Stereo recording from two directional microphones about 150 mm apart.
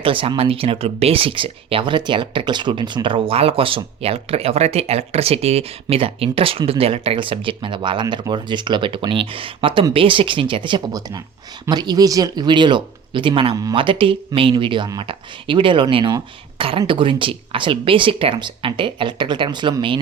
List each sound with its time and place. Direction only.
0.0 s speech: 35° right (ahead or behind)